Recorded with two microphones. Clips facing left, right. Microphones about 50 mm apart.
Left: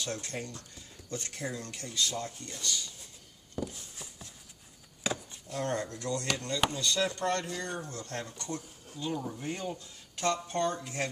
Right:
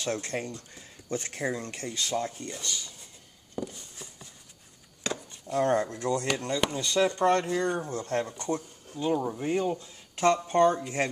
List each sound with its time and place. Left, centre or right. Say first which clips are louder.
0.0 s speech: right 6 dB; right
3.5 s a sound: right 2 dB; centre
5.0 s chopping: right 1 dB; centre
5.5 s speech: right 8 dB; right
6.7 s speech: right 5 dB; right